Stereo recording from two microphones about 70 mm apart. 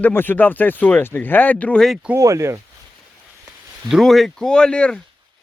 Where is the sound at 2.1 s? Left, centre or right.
Right.